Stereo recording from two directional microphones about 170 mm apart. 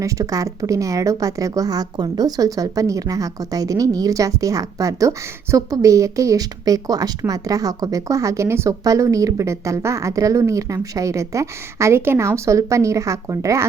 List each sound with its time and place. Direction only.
0.0 s a woman's voice: 20° right (ahead or behind)